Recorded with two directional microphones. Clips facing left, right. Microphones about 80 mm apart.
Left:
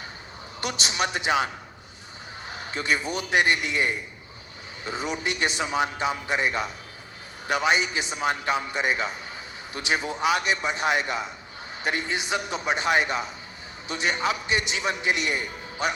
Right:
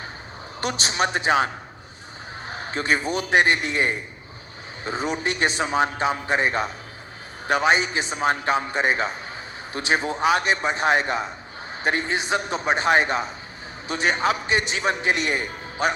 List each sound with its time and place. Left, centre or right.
0.6 s a man's voice: right
2.5 s a man's voice: right